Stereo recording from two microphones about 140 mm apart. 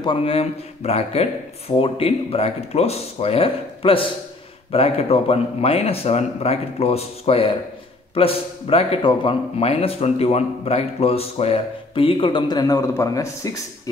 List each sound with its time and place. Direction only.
0.0 s a man's voice: 40° left (ahead or behind); by 13.6 s 25° left (ahead or behind)